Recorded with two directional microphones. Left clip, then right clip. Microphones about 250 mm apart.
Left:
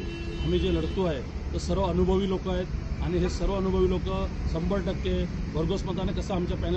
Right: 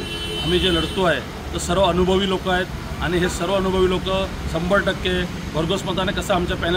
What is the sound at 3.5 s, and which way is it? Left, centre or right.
Speech, centre.